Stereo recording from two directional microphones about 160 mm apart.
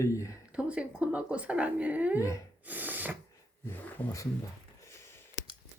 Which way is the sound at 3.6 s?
15° left (ahead or behind).